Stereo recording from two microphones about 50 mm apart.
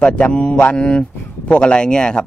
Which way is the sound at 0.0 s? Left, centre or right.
Left.